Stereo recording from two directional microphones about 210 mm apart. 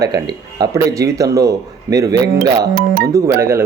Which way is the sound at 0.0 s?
20° right (ahead or behind).